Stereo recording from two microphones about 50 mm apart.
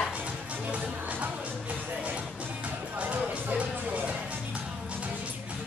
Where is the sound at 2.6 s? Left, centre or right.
Right.